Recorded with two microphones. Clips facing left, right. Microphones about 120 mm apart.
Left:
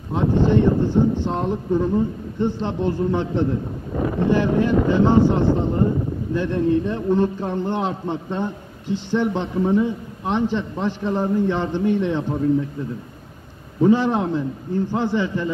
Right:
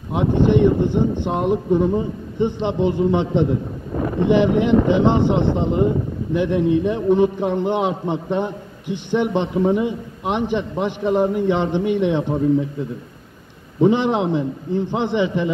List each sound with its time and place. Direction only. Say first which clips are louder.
0.1 s a man's voice: right 2 dB; 15° right (ahead or behind)
13.7 s a man's voice: right 1 dB; 20° right (ahead or behind)